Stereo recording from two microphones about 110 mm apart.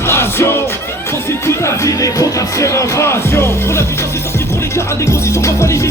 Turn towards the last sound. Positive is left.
turn(degrees=25)  # may be behind; listen again after turning